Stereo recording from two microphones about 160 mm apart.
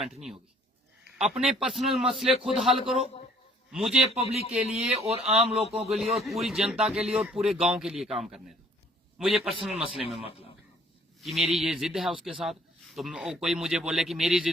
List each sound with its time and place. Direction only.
1.4 s a man's voice: centre (ahead or behind)
4.2 s speech: 40° left (ahead or behind)
4.5 s a man's voice: 5° right (ahead or behind)
4.9 s speech: 40° right (ahead or behind)
5.2 s a man's voice: centre (ahead or behind)
11.2 s a man's voice: centre (ahead or behind)